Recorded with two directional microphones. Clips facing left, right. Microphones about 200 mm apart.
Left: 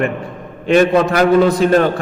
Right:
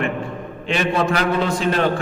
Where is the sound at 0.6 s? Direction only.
45° left (ahead or behind).